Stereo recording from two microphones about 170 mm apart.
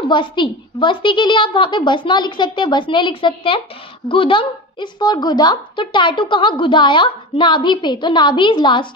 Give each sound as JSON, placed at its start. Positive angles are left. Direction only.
{"t": 0.1, "sound": "a woman's voice", "side_deg": 30}